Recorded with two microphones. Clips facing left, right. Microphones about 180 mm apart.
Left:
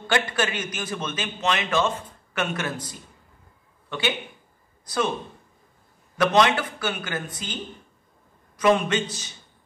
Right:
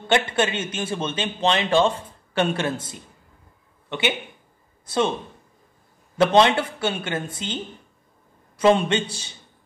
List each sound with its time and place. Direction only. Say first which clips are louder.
0.0 s a man's voice: right 3 dB; 25° right (ahead or behind)
4.8 s speech: right 3 dB; 25° right (ahead or behind)
6.1 s a man's voice: right 3 dB; 25° right (ahead or behind)